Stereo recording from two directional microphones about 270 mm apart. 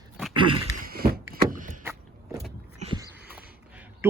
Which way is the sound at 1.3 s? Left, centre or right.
Right.